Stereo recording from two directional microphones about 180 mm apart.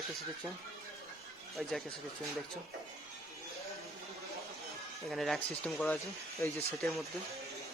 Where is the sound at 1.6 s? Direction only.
Centre (ahead or behind).